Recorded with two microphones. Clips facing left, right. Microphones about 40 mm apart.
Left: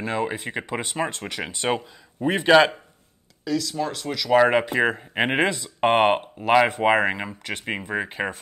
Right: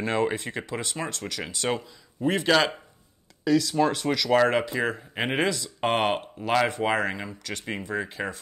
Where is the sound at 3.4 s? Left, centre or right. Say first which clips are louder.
Right 4 dB; centre.